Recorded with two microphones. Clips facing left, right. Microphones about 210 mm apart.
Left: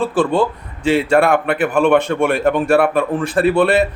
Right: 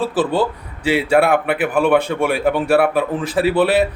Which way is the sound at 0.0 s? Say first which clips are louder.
Left 2 dB; 5° right (ahead or behind).